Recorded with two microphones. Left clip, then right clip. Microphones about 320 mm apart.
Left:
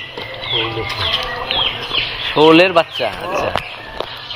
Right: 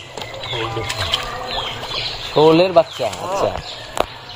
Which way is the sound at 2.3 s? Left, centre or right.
Right.